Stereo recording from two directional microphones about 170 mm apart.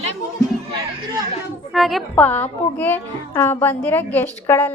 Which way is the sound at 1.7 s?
Centre (ahead or behind).